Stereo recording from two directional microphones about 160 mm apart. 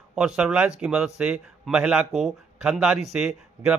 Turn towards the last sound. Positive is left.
turn(degrees=-5)  # may be behind; listen again after turning